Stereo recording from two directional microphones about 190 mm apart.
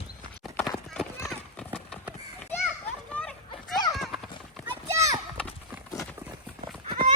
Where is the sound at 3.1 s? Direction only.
5° left (ahead or behind).